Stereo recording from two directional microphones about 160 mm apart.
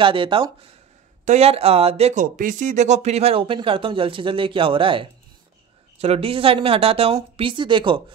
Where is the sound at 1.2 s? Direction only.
40° right (ahead or behind).